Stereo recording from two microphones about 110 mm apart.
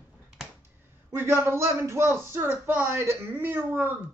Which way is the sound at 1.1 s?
20° right (ahead or behind).